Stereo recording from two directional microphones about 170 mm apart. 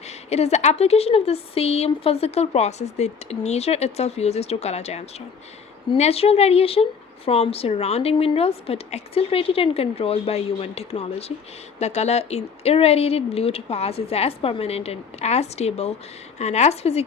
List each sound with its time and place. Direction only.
0.3 s a woman's voice: 40° left (ahead or behind)